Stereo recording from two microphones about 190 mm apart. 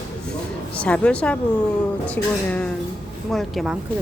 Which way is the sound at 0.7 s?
5° left (ahead or behind).